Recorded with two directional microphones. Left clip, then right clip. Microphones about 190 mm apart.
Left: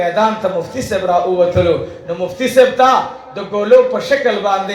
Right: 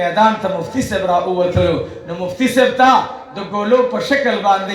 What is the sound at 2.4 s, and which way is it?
Speech, 15° left (ahead or behind).